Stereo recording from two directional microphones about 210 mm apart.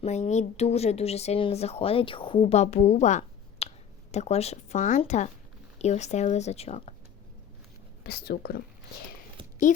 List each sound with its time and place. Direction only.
0.0 s speech: 30° left (ahead or behind)
8.0 s speech: 50° left (ahead or behind)
9.7 s speech: 35° left (ahead or behind)